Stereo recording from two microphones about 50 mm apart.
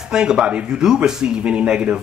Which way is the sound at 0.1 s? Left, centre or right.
Centre.